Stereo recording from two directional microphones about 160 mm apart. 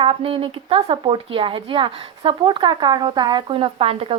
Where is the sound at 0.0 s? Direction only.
35° right (ahead or behind).